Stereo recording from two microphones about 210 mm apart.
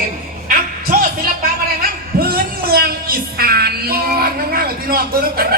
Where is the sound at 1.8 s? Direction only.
45° right (ahead or behind).